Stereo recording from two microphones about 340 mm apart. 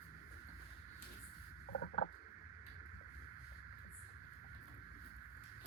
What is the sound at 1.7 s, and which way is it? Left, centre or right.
Patter, left.